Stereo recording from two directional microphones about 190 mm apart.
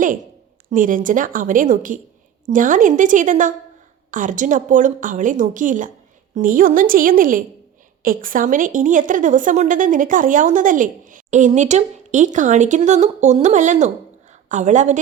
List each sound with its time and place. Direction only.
0.7 s a woman's voice: 45° right (ahead or behind)